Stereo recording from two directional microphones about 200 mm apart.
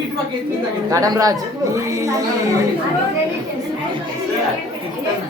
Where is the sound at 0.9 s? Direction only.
15° right (ahead or behind).